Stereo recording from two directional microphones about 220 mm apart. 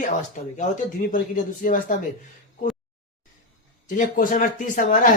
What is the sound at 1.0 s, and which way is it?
Speech, 35° left (ahead or behind).